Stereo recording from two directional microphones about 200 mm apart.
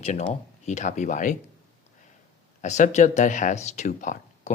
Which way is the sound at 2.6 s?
35° left (ahead or behind).